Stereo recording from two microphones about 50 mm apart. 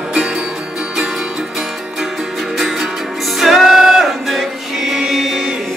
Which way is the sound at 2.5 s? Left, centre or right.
Centre.